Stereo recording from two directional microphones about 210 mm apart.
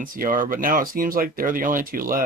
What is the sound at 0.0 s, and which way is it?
Speech, 40° right (ahead or behind).